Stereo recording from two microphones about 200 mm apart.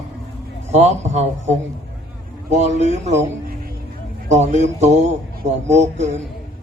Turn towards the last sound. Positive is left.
turn(degrees=-35)  # may be behind; listen again after turning